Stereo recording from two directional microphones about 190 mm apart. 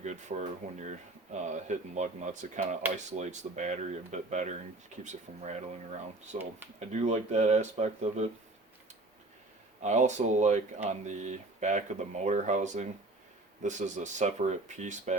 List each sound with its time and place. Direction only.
0.0 s speech: 35° right (ahead or behind)
6.7 s speech: 35° right (ahead or behind)
9.8 s speech: 40° right (ahead or behind)